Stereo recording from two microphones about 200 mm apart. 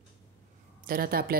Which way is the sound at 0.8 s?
45° right (ahead or behind).